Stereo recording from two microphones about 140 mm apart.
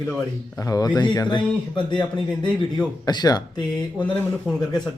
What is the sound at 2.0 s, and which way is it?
Speech, 5° left (ahead or behind).